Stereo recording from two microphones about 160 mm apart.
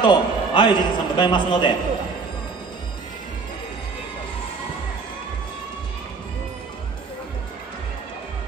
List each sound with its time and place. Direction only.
0.0 s a man's voice: 30° left (ahead or behind)